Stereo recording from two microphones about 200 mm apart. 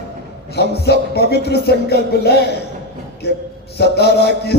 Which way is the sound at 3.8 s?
55° left (ahead or behind).